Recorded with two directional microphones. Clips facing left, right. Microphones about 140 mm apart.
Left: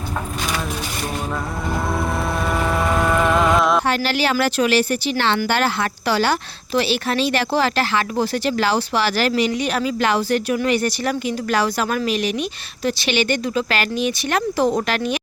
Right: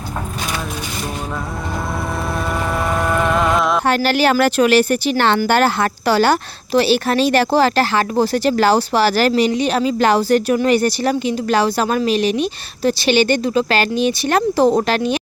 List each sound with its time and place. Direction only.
2.5 s music: centre (ahead or behind)
3.8 s speech: 50° right (ahead or behind); by 15.2 s 30° right (ahead or behind)